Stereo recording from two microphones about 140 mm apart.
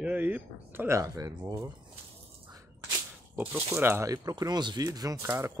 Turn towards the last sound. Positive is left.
turn(degrees=-20)  # may be behind; listen again after turning